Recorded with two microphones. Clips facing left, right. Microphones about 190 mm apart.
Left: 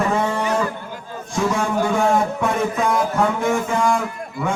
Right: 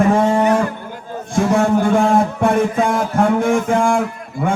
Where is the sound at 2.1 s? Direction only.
50° right (ahead or behind).